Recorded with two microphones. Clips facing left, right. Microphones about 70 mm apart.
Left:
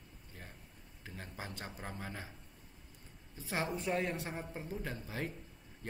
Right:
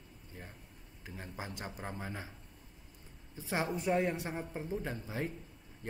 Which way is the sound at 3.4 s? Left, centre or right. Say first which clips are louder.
Right 2 dB; right.